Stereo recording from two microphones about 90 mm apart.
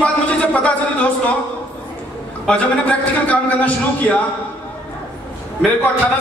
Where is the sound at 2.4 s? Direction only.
15° left (ahead or behind).